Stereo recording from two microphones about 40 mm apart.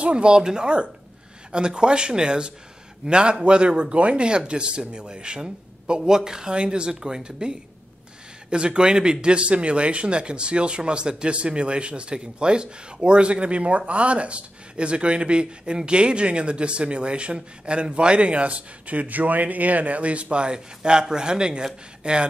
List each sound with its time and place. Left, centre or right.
0.0 s speech: right